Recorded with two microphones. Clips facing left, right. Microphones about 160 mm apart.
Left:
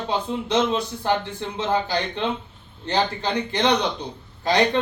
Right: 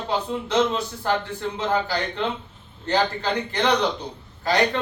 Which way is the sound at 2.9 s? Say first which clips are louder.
Right 1 dB; 15° left (ahead or behind).